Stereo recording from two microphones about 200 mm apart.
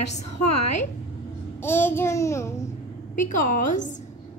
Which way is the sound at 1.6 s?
10° left (ahead or behind).